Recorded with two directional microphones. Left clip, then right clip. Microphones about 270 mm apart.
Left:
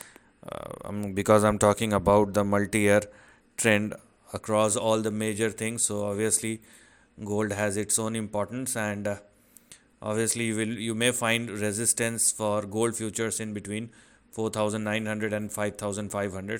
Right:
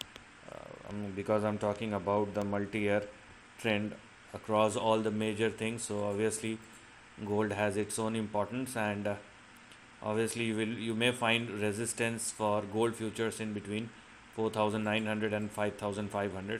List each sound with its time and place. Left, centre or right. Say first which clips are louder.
0.5 s speech: left 9 dB; left